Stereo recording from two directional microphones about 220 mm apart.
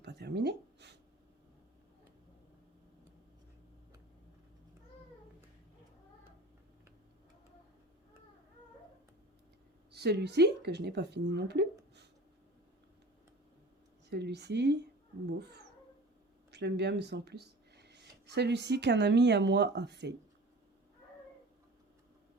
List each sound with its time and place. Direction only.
0.0 s a sound: 50° right (ahead or behind)
9.9 s speech: 50° right (ahead or behind)
14.1 s speech: 50° right (ahead or behind)